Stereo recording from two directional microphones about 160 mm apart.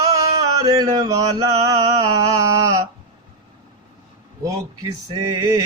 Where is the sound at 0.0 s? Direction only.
20° right (ahead or behind).